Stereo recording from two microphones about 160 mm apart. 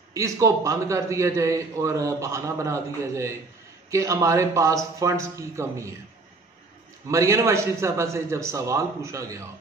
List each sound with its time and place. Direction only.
0.1 s a man's voice: 20° right (ahead or behind)
7.1 s a man's voice: 20° right (ahead or behind)